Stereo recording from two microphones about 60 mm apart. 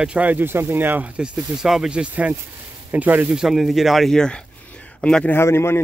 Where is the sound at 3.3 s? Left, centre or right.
Centre.